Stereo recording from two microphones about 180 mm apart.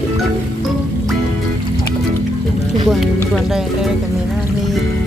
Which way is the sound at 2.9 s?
Centre (ahead or behind).